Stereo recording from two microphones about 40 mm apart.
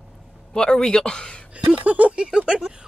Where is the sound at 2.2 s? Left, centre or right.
Right.